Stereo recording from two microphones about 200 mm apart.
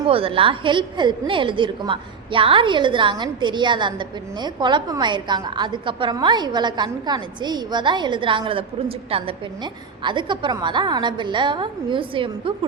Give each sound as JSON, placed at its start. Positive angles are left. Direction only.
{"t": 0.1, "sound": "a woman's voice", "side_deg": -25}